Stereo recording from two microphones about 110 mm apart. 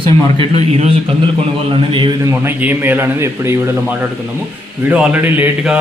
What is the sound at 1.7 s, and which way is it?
Speech, 50° right (ahead or behind).